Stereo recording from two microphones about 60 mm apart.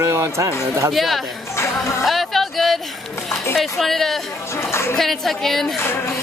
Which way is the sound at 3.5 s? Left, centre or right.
Centre.